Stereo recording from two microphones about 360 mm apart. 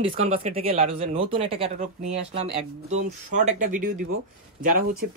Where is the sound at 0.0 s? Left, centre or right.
Centre.